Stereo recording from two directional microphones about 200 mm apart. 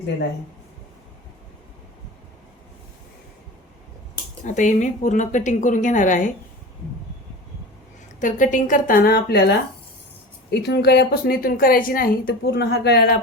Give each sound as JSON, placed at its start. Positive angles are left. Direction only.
{"t": 4.4, "sound": "a woman's voice", "side_deg": 40}
{"t": 8.2, "sound": "a woman's voice", "side_deg": 40}